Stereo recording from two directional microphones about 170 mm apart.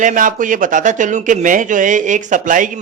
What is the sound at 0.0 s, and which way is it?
Speech, 50° right (ahead or behind).